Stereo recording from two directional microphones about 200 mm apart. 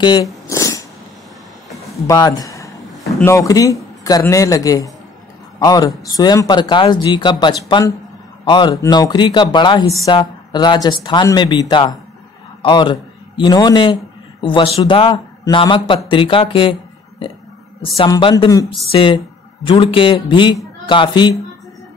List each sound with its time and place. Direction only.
0.0 s a sound: 20° left (ahead or behind)
2.0 s a man's voice: 20° left (ahead or behind)
17.9 s speech: 25° left (ahead or behind)